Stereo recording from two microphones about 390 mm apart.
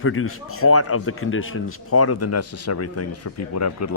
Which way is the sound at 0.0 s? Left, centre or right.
Left.